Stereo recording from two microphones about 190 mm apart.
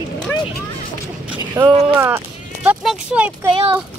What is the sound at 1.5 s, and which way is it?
Speech, 20° right (ahead or behind).